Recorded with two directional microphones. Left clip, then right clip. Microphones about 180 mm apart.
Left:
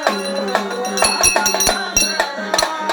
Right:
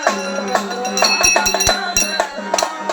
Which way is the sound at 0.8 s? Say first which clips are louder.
Right 3 dB; 10° left (ahead or behind).